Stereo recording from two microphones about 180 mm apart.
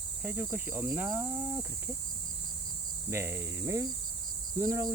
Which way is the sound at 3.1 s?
15° right (ahead or behind).